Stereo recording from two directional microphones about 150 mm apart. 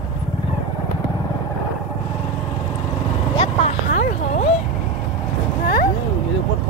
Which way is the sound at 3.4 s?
45° left (ahead or behind).